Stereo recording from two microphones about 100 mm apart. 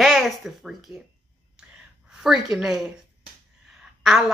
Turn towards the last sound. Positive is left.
turn(degrees=-5)  # may be behind; listen again after turning